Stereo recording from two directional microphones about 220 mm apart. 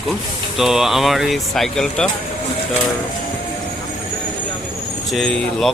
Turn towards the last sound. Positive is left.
turn(degrees=0)  # may be behind; listen again after turning